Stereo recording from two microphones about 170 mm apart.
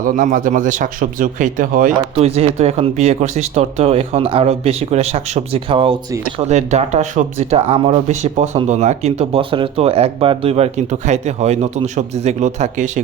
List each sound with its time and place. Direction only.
0.0 s a man's voice: 55° right (ahead or behind)
2.1 s speech: 35° right (ahead or behind)